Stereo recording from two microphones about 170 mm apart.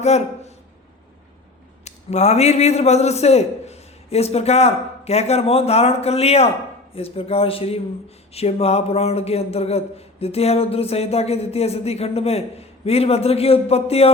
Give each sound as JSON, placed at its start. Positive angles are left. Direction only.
{"t": 0.0, "sound": "speech", "side_deg": 40}
{"t": 1.8, "sound": "a man's voice", "side_deg": 40}